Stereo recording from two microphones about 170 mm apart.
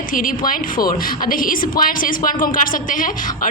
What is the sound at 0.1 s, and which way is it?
A woman's voice, 55° left (ahead or behind).